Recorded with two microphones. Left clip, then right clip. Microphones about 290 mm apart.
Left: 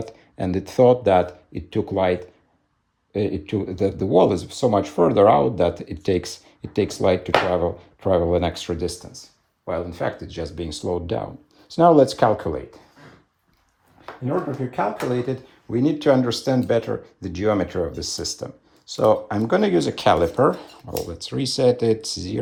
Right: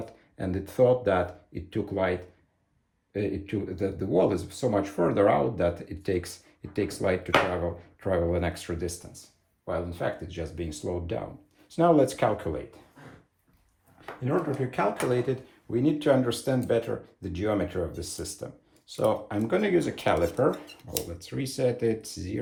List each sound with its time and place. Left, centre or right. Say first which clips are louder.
0.0 s speech: left 7 dB; left
15.1 s speech: left 3 dB; left